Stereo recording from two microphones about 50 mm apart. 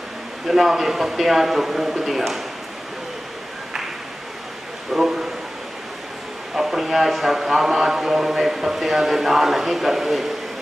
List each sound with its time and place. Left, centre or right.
0.5 s a man's voice: centre
4.9 s speech: centre
6.5 s a man's voice: centre